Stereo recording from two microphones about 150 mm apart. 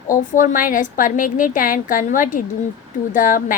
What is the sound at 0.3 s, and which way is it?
A woman's voice, 65° left (ahead or behind).